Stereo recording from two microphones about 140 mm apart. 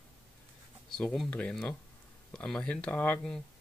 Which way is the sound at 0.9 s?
Centre (ahead or behind).